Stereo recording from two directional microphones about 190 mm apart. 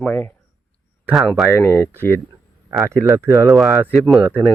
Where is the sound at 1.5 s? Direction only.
10° left (ahead or behind).